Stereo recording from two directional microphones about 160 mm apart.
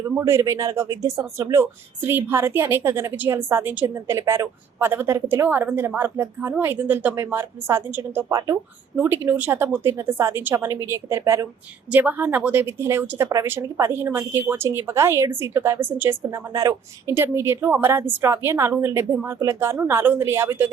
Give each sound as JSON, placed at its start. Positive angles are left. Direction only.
{"t": 0.2, "sound": "speech", "side_deg": -15}